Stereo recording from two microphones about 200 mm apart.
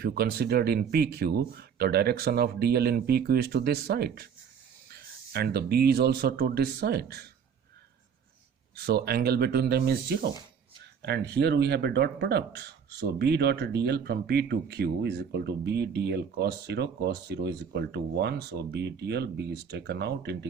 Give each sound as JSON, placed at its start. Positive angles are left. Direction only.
{"t": 0.0, "sound": "speech", "side_deg": -55}
{"t": 8.7, "sound": "speech", "side_deg": -50}